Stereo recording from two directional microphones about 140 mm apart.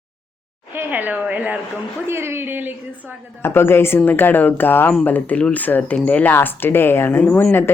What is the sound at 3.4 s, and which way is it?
Speech, 15° left (ahead or behind).